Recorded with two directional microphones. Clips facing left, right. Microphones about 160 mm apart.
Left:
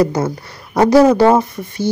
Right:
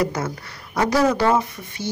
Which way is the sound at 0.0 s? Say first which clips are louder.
Left 7 dB; 30° left (ahead or behind).